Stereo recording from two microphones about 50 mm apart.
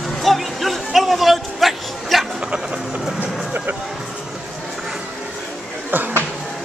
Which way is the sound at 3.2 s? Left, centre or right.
Right.